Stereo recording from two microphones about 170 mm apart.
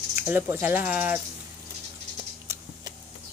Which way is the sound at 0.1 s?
10° right (ahead or behind).